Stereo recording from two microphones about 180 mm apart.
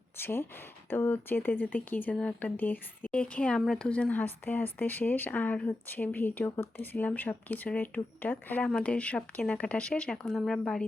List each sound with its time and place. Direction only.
0.2 s speech: 10° left (ahead or behind)